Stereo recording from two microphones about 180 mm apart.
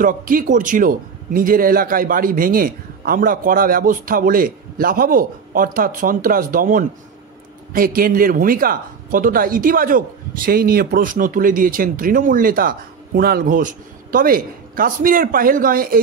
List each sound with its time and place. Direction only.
0.0 s speech: 50° right (ahead or behind)